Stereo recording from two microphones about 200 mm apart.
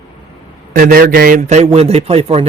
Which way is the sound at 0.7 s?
45° right (ahead or behind).